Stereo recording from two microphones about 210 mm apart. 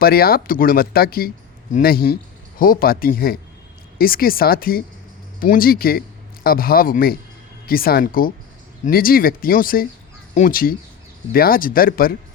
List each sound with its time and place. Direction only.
0.0 s speech: 45° left (ahead or behind)